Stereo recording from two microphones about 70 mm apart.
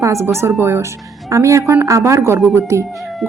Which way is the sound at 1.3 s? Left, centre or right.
Right.